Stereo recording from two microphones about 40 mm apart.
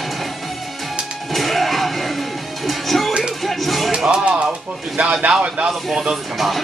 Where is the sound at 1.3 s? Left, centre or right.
Centre.